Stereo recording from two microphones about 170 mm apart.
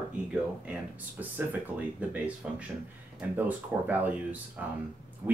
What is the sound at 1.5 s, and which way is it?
Speech, 10° right (ahead or behind).